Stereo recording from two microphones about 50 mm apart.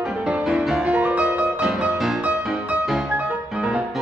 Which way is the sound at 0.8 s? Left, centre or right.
Right.